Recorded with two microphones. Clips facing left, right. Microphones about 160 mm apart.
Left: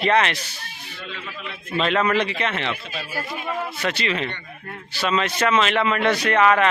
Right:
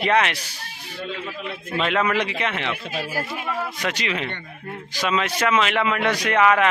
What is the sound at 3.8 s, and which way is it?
A man's voice, 10° right (ahead or behind).